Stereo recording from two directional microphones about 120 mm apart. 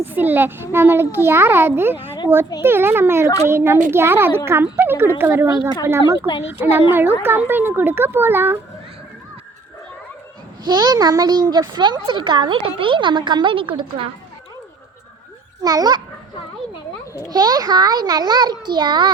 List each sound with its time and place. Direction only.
0.0 s a child's voice: 15° right (ahead or behind)
5.5 s a woman's voice: 35° left (ahead or behind)
6.4 s speech: 15° right (ahead or behind)
10.6 s speech: 35° right (ahead or behind)
15.6 s speech: 35° right (ahead or behind)
17.2 s speech: 35° right (ahead or behind)